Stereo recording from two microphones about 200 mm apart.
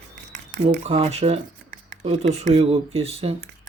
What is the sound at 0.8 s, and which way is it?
Speech, 30° right (ahead or behind).